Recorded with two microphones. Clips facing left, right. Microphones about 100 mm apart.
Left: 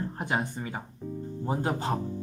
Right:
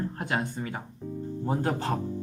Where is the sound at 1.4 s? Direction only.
10° left (ahead or behind).